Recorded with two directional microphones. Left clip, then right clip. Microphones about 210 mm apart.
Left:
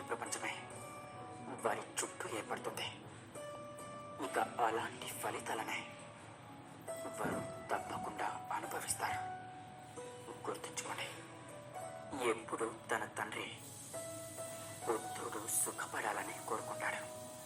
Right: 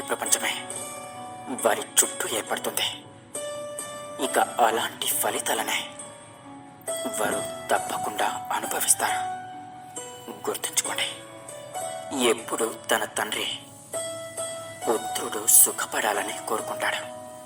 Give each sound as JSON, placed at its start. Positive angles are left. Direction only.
{"t": 0.1, "sound": "speech", "side_deg": -35}
{"t": 4.2, "sound": "speech", "side_deg": -35}
{"t": 6.8, "sound": "speech", "side_deg": -35}
{"t": 10.4, "sound": "speech", "side_deg": -35}
{"t": 14.8, "sound": "speech", "side_deg": -35}